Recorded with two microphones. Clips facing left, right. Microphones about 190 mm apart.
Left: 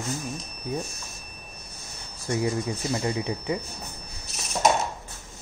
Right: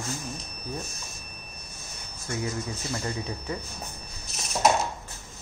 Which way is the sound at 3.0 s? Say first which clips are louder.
Left 5 dB; 15° left (ahead or behind).